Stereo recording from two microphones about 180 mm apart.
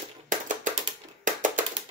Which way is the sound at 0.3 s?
45° right (ahead or behind).